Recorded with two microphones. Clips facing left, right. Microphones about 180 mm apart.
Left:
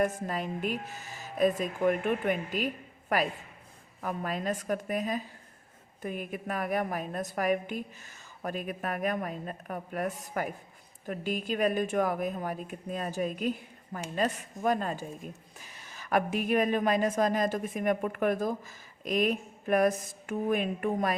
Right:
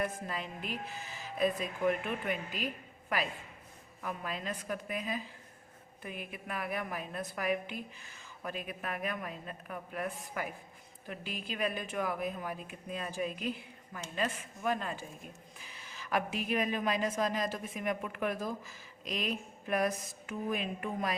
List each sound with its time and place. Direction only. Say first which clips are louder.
0.0 s a woman's voice: left 7 dB; 45° left (ahead or behind)
4.0 s a woman's voice: left 6 dB; 45° left (ahead or behind)